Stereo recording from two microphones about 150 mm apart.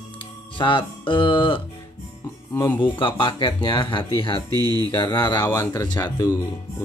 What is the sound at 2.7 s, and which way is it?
Speech, 35° left (ahead or behind).